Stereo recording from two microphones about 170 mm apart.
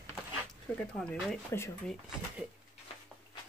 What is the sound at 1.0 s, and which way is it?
Speech, centre (ahead or behind).